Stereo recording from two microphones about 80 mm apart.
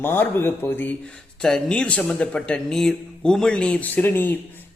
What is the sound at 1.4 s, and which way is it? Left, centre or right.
A man's voice, centre.